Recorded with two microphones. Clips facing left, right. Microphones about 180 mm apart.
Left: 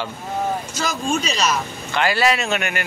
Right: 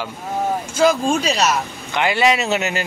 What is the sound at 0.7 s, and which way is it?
A man's voice, 30° right (ahead or behind).